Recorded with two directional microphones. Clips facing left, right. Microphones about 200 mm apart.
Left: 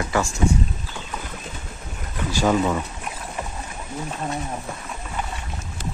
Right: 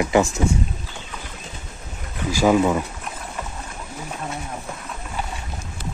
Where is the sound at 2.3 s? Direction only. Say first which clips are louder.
Right 3 dB; 10° right (ahead or behind).